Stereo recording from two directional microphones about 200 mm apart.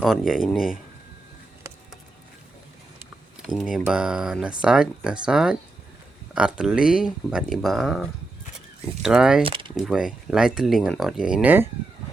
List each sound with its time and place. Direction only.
0.0 s speech: centre (ahead or behind)
3.4 s speech: centre (ahead or behind)
9.4 s speech: 25° right (ahead or behind)
9.7 s speech: centre (ahead or behind)